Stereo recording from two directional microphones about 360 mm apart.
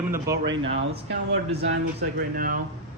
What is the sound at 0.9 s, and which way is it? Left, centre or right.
Speech, right.